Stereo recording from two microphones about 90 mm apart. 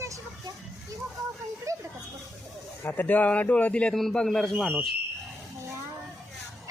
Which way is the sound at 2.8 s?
20° left (ahead or behind).